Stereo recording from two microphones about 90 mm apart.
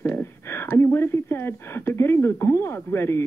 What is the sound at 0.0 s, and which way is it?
Speech, 25° left (ahead or behind).